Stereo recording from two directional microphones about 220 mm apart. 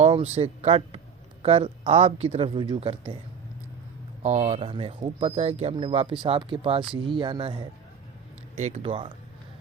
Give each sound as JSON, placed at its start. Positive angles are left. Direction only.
{"t": 0.0, "sound": "a man's voice", "side_deg": -25}
{"t": 4.2, "sound": "speech", "side_deg": -30}